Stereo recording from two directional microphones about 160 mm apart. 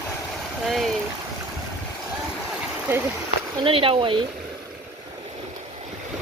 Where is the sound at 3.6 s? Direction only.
35° right (ahead or behind).